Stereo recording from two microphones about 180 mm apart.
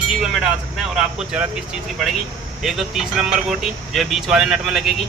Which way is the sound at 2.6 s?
Centre (ahead or behind).